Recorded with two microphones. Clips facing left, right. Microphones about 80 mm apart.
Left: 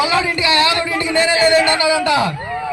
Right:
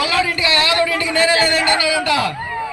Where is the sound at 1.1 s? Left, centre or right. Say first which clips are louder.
Left 3 dB; left.